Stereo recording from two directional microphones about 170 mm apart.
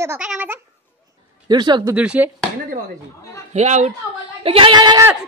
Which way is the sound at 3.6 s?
45° right (ahead or behind).